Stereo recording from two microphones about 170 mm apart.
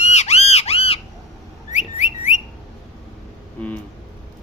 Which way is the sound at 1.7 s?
45° left (ahead or behind).